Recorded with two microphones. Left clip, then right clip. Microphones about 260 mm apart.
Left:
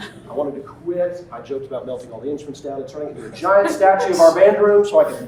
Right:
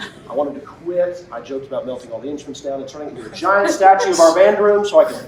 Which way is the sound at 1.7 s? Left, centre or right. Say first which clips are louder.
Right 3 dB; right.